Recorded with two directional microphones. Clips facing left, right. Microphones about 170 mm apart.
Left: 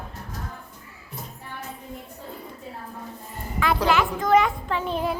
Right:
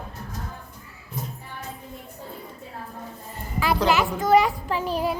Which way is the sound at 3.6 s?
5° right (ahead or behind).